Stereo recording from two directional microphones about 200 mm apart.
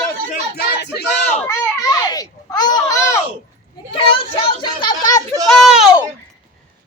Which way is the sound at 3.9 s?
25° left (ahead or behind).